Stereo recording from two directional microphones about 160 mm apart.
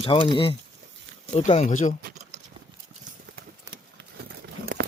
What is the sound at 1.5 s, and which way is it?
Speech, 50° left (ahead or behind).